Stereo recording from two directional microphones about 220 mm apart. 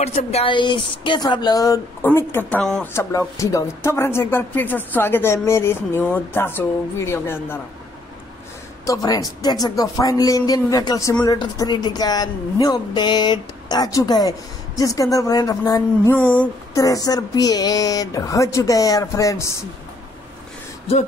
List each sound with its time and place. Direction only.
0.0 s speech: 30° left (ahead or behind); by 7.6 s 10° left (ahead or behind)
8.8 s speech: 15° left (ahead or behind)